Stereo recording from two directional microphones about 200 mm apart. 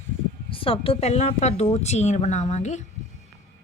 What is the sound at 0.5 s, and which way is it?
A woman's voice, 25° left (ahead or behind).